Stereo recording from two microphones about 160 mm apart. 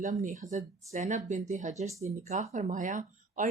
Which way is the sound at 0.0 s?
50° right (ahead or behind).